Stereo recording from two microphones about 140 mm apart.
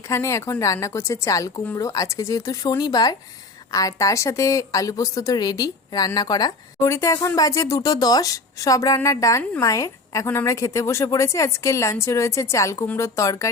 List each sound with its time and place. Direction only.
0.1 s speech: 20° left (ahead or behind)